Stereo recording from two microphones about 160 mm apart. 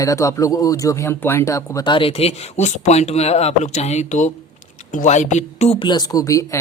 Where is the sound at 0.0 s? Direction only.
20° left (ahead or behind).